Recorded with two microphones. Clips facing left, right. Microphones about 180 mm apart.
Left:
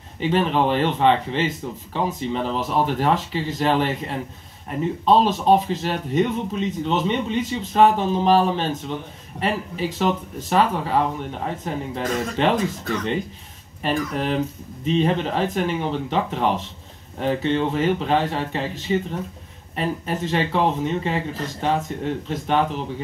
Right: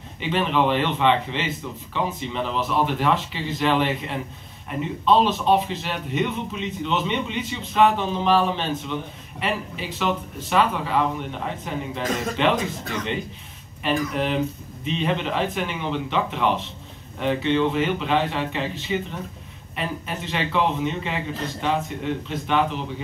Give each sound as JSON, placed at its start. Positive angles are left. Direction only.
{"t": 0.2, "sound": "a man's voice", "side_deg": 40}
{"t": 13.8, "sound": "a man's voice", "side_deg": 40}